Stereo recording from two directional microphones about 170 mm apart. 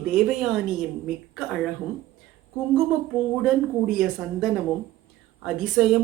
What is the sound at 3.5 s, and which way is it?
Speech, centre (ahead or behind).